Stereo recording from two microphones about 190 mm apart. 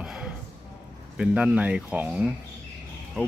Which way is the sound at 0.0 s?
5° right (ahead or behind).